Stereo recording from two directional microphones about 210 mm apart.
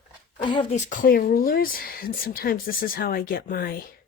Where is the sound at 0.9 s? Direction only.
40° left (ahead or behind).